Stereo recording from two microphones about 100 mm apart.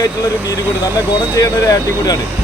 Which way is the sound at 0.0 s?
35° left (ahead or behind).